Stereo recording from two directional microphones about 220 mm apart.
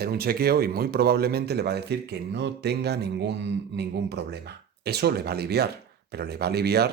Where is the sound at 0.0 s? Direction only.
45° right (ahead or behind).